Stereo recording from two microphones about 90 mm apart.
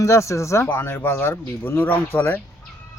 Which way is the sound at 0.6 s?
25° left (ahead or behind).